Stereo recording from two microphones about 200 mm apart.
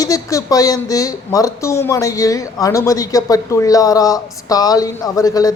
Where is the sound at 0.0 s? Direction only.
15° left (ahead or behind).